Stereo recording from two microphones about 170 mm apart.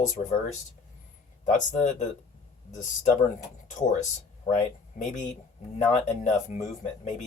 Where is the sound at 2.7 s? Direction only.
45° left (ahead or behind).